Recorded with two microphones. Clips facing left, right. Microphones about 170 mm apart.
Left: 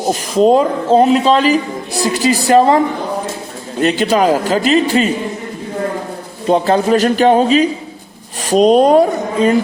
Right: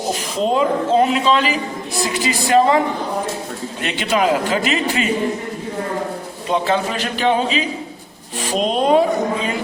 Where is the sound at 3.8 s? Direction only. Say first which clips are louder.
Left 7 dB; 40° left (ahead or behind).